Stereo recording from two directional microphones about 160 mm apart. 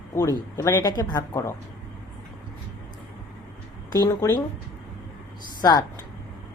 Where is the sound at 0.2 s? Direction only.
20° left (ahead or behind).